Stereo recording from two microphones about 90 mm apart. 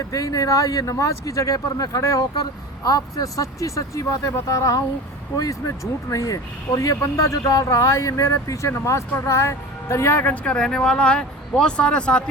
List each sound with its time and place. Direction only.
0.1 s speech: 40° left (ahead or behind); by 12.2 s 10° left (ahead or behind)